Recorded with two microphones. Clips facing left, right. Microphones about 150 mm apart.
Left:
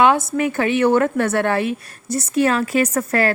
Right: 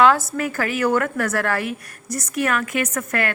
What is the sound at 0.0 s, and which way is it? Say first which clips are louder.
A woman's voice: left 1 dB; 20° left (ahead or behind).